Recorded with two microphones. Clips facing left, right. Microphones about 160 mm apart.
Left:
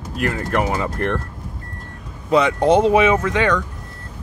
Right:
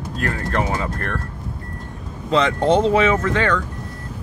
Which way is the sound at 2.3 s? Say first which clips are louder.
Left 2 dB; 15° left (ahead or behind).